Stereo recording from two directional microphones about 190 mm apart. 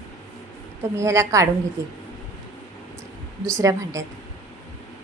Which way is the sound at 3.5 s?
15° right (ahead or behind).